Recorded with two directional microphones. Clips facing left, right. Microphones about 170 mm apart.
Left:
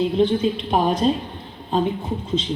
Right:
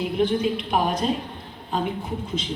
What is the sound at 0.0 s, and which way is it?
A woman's voice, 25° left (ahead or behind).